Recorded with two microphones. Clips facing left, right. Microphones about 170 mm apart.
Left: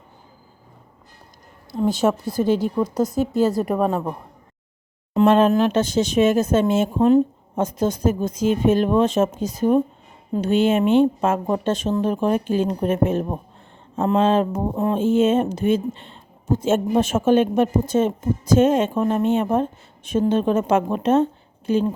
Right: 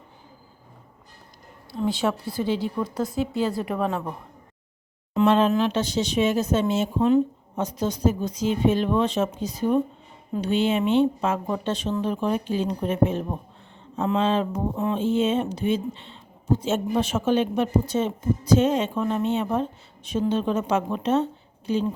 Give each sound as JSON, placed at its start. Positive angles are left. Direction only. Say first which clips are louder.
{"t": 1.7, "sound": "speech", "louder": "left 5 dB", "side_deg": 45}
{"t": 5.1, "sound": "speech", "louder": "left 4 dB", "side_deg": 50}